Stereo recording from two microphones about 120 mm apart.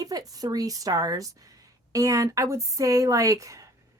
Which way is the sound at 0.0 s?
30° right (ahead or behind).